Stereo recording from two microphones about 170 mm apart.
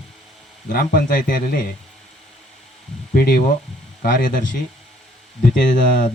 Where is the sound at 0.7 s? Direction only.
55° left (ahead or behind).